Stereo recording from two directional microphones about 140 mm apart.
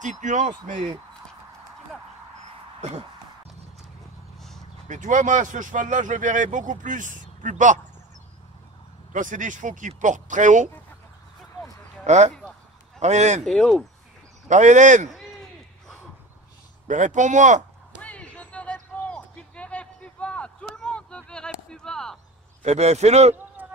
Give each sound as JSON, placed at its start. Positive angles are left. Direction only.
{"t": 0.0, "sound": "speech", "side_deg": -60}
{"t": 2.8, "sound": "speech", "side_deg": -50}
{"t": 4.8, "sound": "speech", "side_deg": -65}
{"t": 9.1, "sound": "speech", "side_deg": -65}
{"t": 11.6, "sound": "a sound", "side_deg": -5}
{"t": 12.1, "sound": "speech", "side_deg": -55}
{"t": 13.5, "sound": "speech", "side_deg": 5}
{"t": 14.5, "sound": "speech", "side_deg": -60}
{"t": 16.8, "sound": "speech", "side_deg": -60}
{"t": 18.0, "sound": "a sound", "side_deg": 10}
{"t": 22.6, "sound": "speech", "side_deg": -50}
{"t": 23.3, "sound": "a sound", "side_deg": -15}